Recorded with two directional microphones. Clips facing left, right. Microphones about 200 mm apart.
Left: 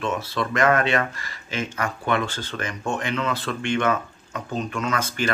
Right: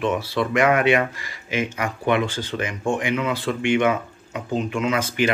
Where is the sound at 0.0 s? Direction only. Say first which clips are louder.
Right 4 dB; 15° right (ahead or behind).